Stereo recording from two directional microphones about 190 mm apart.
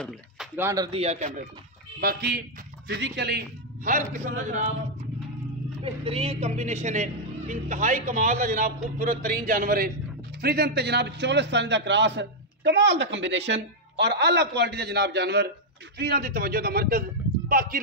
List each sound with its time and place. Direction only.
0.6 s speech: 15° right (ahead or behind)
0.9 s a man's voice: 35° right (ahead or behind)
2.0 s a man's voice: 55° right (ahead or behind); by 4.7 s 40° right (ahead or behind)
6.0 s a man's voice: 30° right (ahead or behind); by 17.7 s 50° right (ahead or behind)